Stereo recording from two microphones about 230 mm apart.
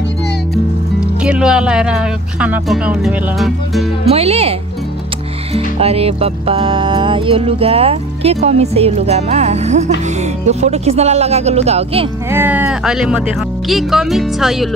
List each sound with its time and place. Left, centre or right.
1.2 s speech: centre
4.0 s music: right
12.3 s speech: centre